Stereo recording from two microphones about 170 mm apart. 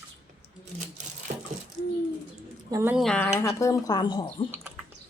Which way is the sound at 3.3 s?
15° left (ahead or behind).